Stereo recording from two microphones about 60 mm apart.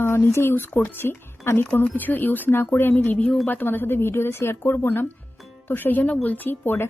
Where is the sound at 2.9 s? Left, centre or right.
Left.